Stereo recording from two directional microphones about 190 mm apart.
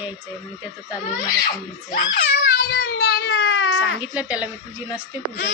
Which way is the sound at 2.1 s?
55° left (ahead or behind).